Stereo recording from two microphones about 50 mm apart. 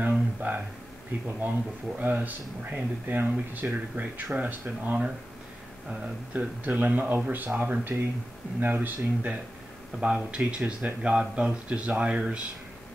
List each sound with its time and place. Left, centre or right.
0.0 s speech: right
5.9 s speech: right
9.9 s speech: centre